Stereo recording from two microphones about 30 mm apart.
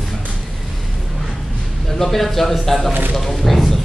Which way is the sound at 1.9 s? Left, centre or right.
Centre.